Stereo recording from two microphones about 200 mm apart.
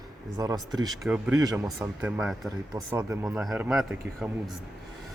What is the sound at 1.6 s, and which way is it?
Speech, 5° right (ahead or behind).